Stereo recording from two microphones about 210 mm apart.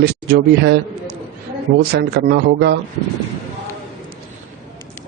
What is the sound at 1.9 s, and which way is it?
Speech, 50° right (ahead or behind).